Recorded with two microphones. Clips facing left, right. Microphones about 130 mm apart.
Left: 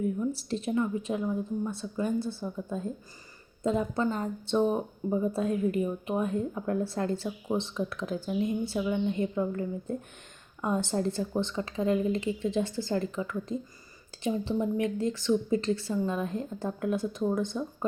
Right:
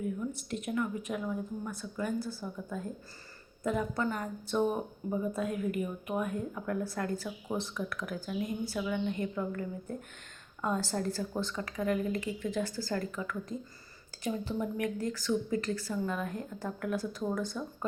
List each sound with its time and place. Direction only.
0.0 s speech: 30° left (ahead or behind)